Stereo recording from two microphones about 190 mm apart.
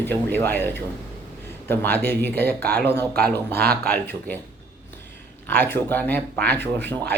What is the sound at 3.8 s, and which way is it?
Speech, 10° left (ahead or behind).